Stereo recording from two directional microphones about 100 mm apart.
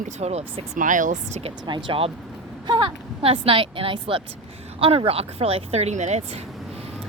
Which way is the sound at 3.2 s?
70° right (ahead or behind).